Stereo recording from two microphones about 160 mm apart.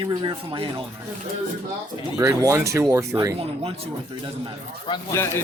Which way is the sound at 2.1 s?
20° right (ahead or behind).